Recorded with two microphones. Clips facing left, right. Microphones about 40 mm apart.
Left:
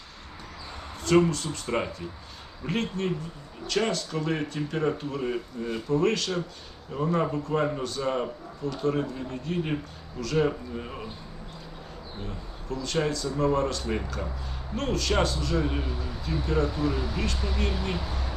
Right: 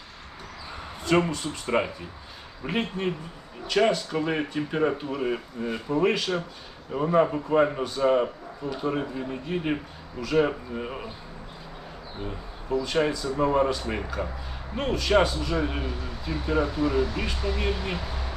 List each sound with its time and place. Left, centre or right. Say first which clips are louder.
1.0 s a man's voice: left 1 dB; centre
12.2 s a man's voice: right 5 dB; centre